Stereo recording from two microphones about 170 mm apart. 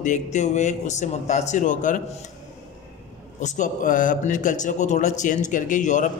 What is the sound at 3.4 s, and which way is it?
A man's voice, 45° left (ahead or behind).